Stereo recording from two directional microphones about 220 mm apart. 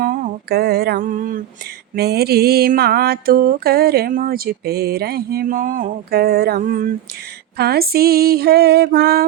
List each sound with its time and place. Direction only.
0.0 s mantra: 40° right (ahead or behind)